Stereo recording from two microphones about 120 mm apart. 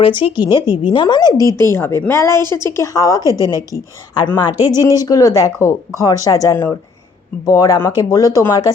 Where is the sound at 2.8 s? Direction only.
30° left (ahead or behind).